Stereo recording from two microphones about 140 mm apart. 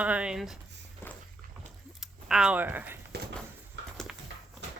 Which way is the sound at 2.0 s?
5° right (ahead or behind).